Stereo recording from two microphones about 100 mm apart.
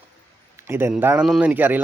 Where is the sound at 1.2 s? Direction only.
10° right (ahead or behind).